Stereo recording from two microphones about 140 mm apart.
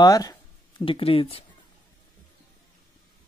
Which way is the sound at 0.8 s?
40° left (ahead or behind).